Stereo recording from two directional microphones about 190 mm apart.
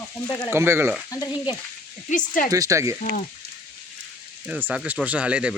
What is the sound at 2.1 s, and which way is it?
Speech, 45° left (ahead or behind).